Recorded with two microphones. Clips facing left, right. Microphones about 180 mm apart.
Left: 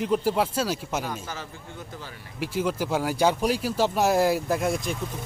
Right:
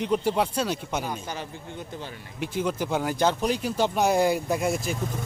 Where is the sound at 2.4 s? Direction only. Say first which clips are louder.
Left 1 dB; 5° left (ahead or behind).